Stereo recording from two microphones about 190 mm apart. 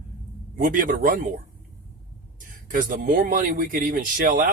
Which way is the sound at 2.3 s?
45° right (ahead or behind).